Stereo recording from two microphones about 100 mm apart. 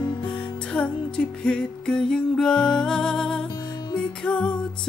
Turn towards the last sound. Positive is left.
turn(degrees=10)  # may be behind; listen again after turning